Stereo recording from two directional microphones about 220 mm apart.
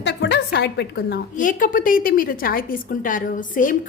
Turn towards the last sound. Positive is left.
turn(degrees=35)  # may be behind; listen again after turning